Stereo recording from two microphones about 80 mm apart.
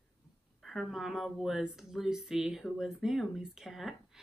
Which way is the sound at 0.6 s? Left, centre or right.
Centre.